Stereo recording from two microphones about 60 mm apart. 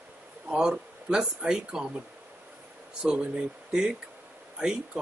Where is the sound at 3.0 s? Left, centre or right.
Centre.